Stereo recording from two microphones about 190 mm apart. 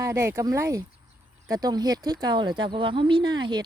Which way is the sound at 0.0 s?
15° right (ahead or behind).